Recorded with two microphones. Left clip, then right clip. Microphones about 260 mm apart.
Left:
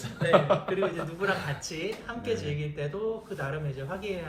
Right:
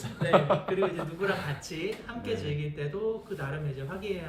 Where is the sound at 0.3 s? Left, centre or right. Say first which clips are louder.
Left 1 dB; right.